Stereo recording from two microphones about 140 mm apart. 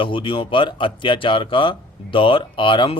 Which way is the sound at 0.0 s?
40° left (ahead or behind).